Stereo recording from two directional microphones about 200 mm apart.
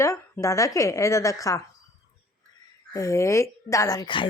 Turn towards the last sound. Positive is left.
turn(degrees=20)  # may be behind; listen again after turning